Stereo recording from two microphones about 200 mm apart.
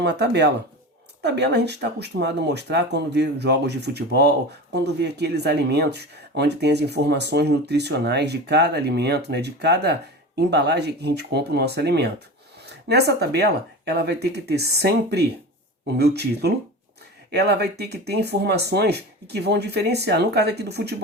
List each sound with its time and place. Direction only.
0.0 s speech: 60° right (ahead or behind)